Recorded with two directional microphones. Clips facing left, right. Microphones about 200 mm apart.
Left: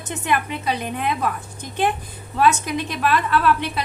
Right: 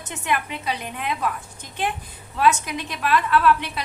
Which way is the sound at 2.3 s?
40° left (ahead or behind).